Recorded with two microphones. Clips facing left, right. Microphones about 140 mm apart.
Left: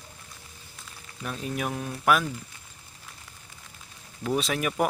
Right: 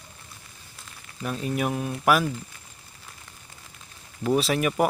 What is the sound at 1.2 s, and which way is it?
Speech, centre (ahead or behind).